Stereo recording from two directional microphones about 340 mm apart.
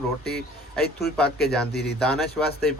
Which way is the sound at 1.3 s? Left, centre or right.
Left.